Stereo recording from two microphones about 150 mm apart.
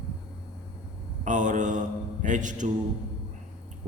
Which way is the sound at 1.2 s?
55° right (ahead or behind).